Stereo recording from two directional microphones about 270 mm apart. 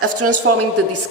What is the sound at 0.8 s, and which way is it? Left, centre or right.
Speech, right.